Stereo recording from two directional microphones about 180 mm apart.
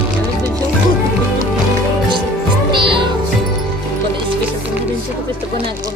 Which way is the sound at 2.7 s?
30° right (ahead or behind).